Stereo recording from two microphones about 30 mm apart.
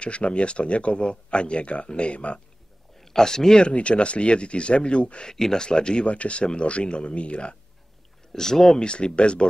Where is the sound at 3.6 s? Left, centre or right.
Left.